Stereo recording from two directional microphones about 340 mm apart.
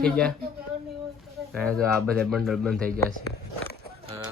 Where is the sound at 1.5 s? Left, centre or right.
Centre.